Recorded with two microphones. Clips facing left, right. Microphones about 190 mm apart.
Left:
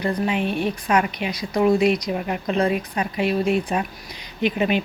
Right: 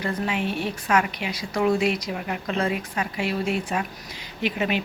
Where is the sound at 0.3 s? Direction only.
20° left (ahead or behind).